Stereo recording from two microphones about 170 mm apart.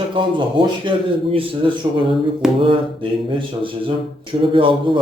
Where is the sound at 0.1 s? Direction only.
30° right (ahead or behind).